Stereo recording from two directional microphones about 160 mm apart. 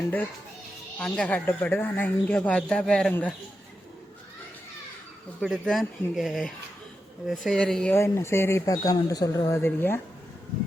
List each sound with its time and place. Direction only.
0.9 s speech: 5° left (ahead or behind)
5.4 s speech: centre (ahead or behind)
7.9 s speech: 15° left (ahead or behind)